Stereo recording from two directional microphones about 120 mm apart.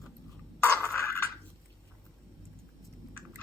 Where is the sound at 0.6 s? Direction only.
25° left (ahead or behind).